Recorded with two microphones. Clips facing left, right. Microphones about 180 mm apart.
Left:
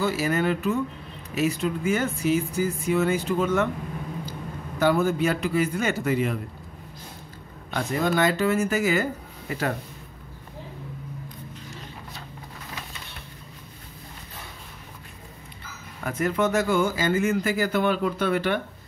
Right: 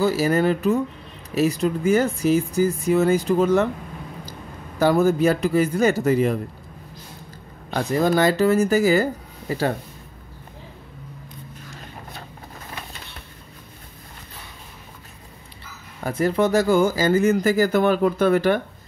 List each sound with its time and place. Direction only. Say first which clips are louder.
0.0 s a man's voice: right 5 dB; 35° right (ahead or behind)
7.7 s speech: right 5 dB; 35° right (ahead or behind)
16.0 s speech: right 4 dB; 35° right (ahead or behind)